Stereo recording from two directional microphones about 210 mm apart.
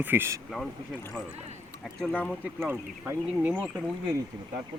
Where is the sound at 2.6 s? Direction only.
10° right (ahead or behind).